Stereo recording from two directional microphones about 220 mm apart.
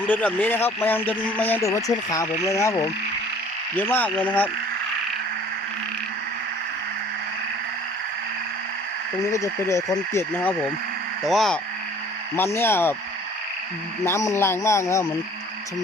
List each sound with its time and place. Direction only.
0.0 s speech: 5° left (ahead or behind)
9.3 s speech: 15° left (ahead or behind)
11.2 s speech: centre (ahead or behind)
14.0 s speech: 15° left (ahead or behind)